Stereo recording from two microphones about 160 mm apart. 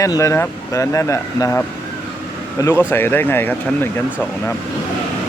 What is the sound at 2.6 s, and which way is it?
Speech, 15° left (ahead or behind).